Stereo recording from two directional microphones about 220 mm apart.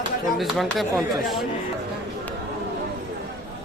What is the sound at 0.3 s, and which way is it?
Speech, centre (ahead or behind).